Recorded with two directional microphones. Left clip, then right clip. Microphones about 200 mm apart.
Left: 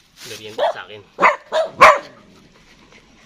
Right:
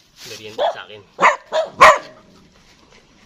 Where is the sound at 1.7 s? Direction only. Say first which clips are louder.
Even; 50° right (ahead or behind).